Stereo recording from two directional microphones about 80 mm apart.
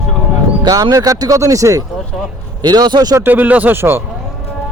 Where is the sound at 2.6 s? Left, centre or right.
Right.